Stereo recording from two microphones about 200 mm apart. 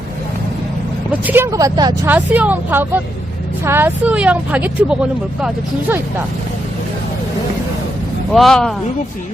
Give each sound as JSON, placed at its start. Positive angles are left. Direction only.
{"t": 1.2, "sound": "speech", "side_deg": -10}
{"t": 2.0, "sound": "speech", "side_deg": -10}
{"t": 8.3, "sound": "speech", "side_deg": 0}